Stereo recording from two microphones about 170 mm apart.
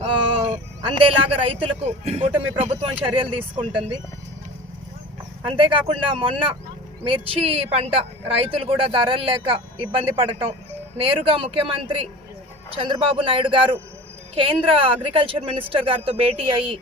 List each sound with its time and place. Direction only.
0.0 s a sound: 35° right (ahead or behind)
2.0 s speech: 35° right (ahead or behind)
5.5 s speech: 30° right (ahead or behind)